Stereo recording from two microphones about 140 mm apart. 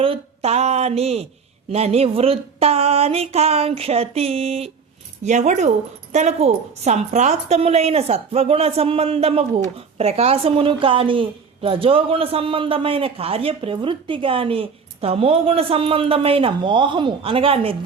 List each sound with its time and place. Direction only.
0.0 s speech: 45° right (ahead or behind)
5.2 s speech: 55° right (ahead or behind)